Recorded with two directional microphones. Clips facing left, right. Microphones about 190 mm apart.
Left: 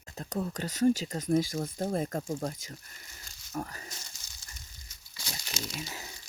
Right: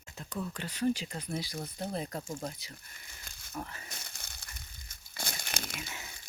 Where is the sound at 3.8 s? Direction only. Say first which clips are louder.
Even; 60° right (ahead or behind).